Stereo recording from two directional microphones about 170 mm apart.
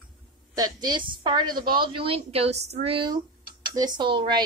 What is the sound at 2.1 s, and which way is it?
A woman's voice, 35° right (ahead or behind).